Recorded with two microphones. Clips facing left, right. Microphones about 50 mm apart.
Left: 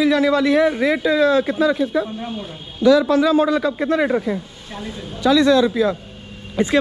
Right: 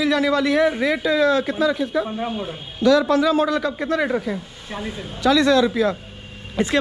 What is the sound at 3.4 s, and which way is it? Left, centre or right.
Speech, left.